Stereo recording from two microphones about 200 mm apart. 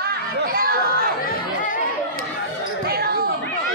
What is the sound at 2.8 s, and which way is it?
Basketball bounce, 50° right (ahead or behind).